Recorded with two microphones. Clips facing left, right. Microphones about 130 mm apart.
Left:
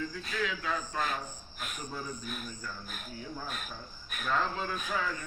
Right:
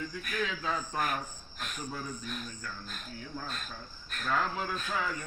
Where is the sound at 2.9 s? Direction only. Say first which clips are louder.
Left 1 dB; 10° left (ahead or behind).